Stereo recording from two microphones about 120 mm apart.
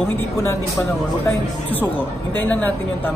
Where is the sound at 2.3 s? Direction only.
15° left (ahead or behind).